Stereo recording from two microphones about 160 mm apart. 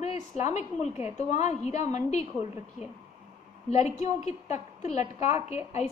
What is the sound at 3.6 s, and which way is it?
A woman's voice, 45° left (ahead or behind).